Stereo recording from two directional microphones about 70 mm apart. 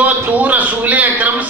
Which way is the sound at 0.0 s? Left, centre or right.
Right.